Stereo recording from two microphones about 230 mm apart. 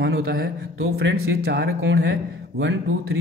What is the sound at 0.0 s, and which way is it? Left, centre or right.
A man's voice, right.